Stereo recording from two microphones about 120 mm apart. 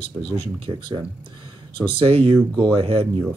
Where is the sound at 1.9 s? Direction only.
50° right (ahead or behind).